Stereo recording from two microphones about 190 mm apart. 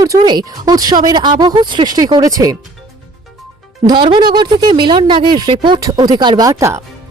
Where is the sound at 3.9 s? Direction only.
25° right (ahead or behind).